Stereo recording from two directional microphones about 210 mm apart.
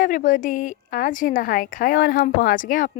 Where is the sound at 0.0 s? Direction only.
40° left (ahead or behind).